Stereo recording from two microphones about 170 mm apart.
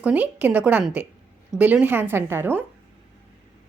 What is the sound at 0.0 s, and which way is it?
A woman's voice, 10° right (ahead or behind).